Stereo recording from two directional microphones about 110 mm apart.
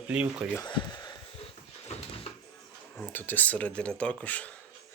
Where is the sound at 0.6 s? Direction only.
40° left (ahead or behind).